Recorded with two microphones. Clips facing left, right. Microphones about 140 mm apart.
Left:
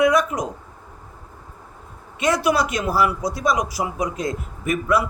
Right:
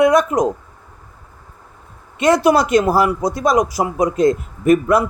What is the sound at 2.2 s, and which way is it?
A man's voice, 55° right (ahead or behind).